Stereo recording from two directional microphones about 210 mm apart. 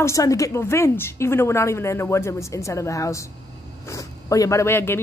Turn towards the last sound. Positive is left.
turn(degrees=10)  # may be behind; listen again after turning